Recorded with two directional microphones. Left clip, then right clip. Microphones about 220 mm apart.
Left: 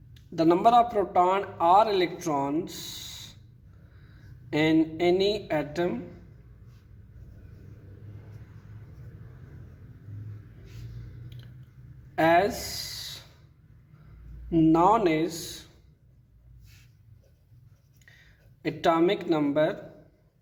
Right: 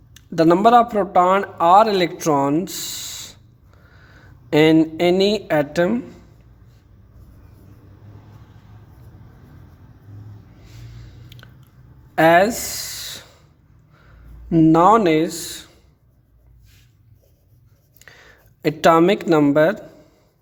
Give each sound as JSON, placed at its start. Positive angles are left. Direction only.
{"t": 0.1, "sound": "a man's voice", "side_deg": -40}
{"t": 4.4, "sound": "a man's voice", "side_deg": -40}
{"t": 11.4, "sound": "biting", "side_deg": -40}
{"t": 12.1, "sound": "a sound", "side_deg": -40}
{"t": 14.5, "sound": "a man's voice", "side_deg": -35}
{"t": 18.0, "sound": "speech", "side_deg": -40}